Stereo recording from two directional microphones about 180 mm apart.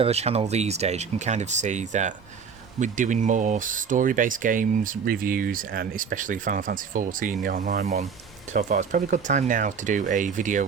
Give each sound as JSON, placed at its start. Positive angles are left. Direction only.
{"t": 0.0, "sound": "speech", "side_deg": -35}